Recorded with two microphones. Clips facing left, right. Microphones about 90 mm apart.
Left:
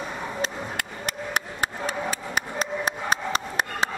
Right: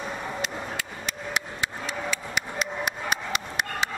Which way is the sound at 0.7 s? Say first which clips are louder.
Left 3 dB; 50° left (ahead or behind).